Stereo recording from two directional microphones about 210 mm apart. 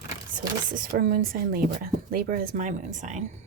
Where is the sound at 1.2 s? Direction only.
40° right (ahead or behind).